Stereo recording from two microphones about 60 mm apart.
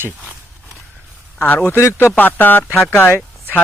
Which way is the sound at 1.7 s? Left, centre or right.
Left.